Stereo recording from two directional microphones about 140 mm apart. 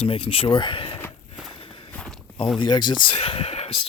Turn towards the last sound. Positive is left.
turn(degrees=45)  # may be behind; listen again after turning